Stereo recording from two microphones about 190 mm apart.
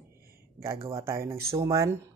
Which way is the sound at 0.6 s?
15° right (ahead or behind).